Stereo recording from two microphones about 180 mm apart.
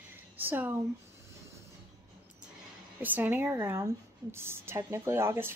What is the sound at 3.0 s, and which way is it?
Speech, 10° right (ahead or behind).